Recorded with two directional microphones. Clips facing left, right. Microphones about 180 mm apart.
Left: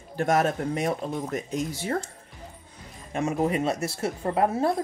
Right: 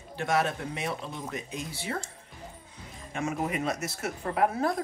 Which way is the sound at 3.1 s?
35° left (ahead or behind).